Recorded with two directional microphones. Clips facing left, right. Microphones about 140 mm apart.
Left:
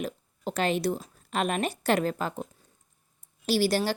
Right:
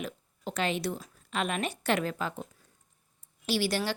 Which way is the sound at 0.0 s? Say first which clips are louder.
Left 4 dB; 40° left (ahead or behind).